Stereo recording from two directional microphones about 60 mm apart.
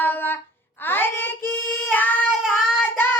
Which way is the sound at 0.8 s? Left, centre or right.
Left.